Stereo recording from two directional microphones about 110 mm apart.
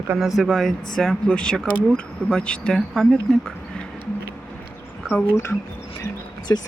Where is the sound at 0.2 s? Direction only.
Centre (ahead or behind).